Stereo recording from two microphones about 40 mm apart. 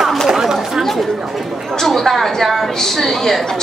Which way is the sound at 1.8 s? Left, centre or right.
Centre.